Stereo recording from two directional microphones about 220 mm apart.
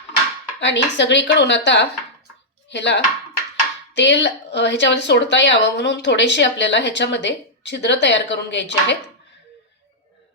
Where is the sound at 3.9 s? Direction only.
55° left (ahead or behind).